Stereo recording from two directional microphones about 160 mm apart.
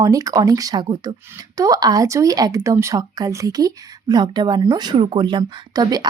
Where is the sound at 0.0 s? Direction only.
20° right (ahead or behind).